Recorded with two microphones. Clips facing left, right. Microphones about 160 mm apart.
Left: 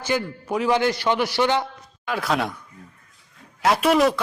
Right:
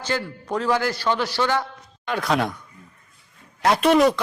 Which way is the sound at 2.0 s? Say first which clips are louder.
Right 1 dB; 5° left (ahead or behind).